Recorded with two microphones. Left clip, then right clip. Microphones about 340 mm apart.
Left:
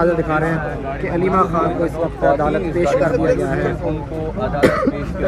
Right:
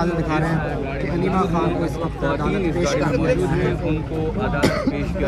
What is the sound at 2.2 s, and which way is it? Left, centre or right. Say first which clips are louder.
Speech: left 7 dB; left.